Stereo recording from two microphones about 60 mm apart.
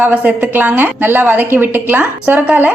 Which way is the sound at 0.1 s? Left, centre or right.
Right.